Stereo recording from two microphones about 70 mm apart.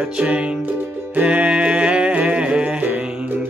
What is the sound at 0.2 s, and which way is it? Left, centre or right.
Music, centre.